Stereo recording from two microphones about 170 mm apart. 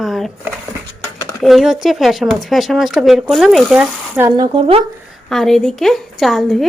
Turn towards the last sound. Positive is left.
turn(degrees=0)  # may be behind; listen again after turning